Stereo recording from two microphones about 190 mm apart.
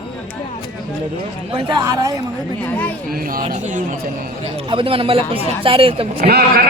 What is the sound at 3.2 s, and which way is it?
Speech, 50° right (ahead or behind).